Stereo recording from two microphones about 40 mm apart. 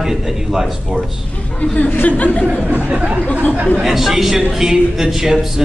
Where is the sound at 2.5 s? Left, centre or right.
Right.